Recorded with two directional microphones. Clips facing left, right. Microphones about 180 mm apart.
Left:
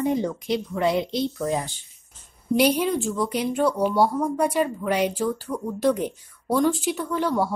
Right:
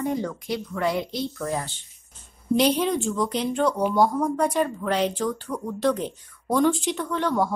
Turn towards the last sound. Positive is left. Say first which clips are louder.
# even
turn(degrees=10)  # may be behind; listen again after turning